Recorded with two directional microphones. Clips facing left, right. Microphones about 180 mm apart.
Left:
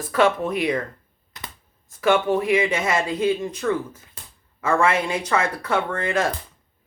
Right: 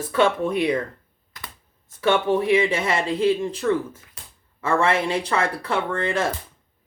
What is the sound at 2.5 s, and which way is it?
Speech, 30° right (ahead or behind).